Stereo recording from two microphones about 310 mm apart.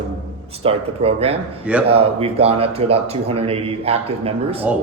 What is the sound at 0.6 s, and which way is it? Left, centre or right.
A man's voice, centre.